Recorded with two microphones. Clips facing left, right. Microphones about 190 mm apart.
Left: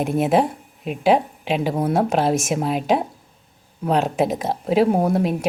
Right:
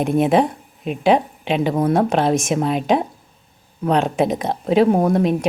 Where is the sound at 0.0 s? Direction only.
5° left (ahead or behind).